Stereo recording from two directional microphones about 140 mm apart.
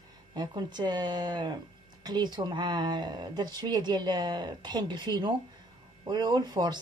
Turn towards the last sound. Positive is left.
turn(degrees=-30)  # may be behind; listen again after turning